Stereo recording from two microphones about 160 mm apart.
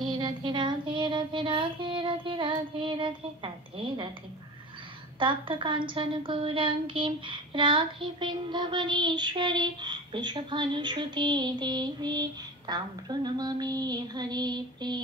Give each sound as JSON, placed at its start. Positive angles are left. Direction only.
{"t": 0.0, "sound": "child singing", "side_deg": -30}
{"t": 5.2, "sound": "a woman's voice", "side_deg": -30}